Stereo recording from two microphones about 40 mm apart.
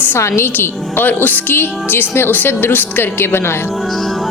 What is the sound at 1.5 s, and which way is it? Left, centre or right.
Speech, left.